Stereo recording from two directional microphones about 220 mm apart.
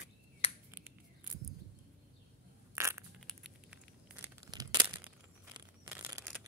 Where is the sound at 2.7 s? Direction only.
10° right (ahead or behind).